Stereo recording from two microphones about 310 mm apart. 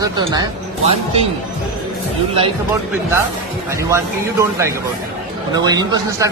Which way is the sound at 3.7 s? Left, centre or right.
Centre.